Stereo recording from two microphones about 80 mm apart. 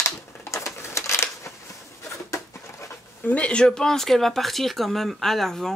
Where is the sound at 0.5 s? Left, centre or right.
Left.